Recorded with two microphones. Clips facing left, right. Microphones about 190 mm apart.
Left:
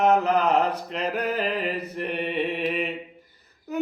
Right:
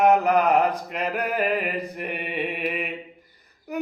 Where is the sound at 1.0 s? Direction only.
55° right (ahead or behind).